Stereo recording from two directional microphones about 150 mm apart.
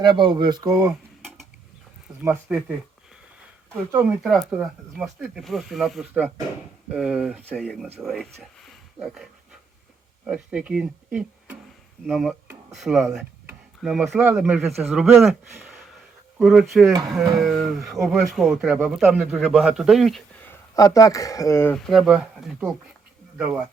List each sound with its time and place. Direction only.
0.0 s speech: 30° right (ahead or behind)
2.2 s speech: 15° right (ahead or behind)
3.9 s speech: 5° right (ahead or behind)
7.9 s a sound: centre (ahead or behind)
10.2 s speech: 5° right (ahead or behind)
20.4 s speech: 20° left (ahead or behind)
21.8 s speech: centre (ahead or behind)